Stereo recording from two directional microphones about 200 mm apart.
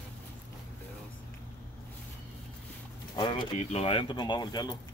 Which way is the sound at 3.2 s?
25° left (ahead or behind).